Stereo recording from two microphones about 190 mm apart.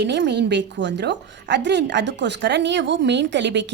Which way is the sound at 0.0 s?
65° right (ahead or behind).